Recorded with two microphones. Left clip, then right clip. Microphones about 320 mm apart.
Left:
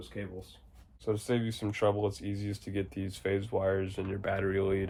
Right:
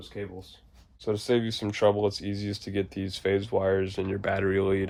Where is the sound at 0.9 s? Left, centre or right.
Right.